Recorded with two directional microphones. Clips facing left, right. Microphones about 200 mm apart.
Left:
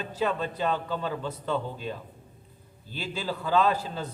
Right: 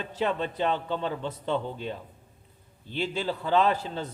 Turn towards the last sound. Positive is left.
turn(degrees=-25)  # may be behind; listen again after turning